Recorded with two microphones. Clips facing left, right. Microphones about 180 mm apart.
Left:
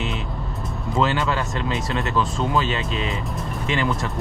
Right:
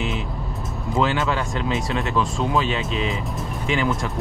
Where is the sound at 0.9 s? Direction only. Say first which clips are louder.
Even; centre (ahead or behind).